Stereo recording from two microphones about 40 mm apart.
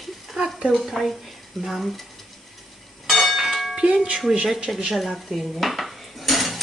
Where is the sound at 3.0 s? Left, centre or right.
Centre.